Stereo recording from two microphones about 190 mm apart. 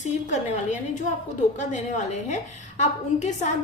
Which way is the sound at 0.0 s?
40° left (ahead or behind).